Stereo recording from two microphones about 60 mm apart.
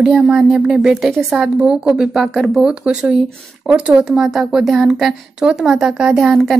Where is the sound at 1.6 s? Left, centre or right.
Centre.